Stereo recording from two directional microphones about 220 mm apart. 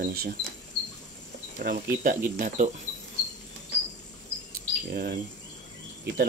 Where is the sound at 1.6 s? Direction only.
40° right (ahead or behind).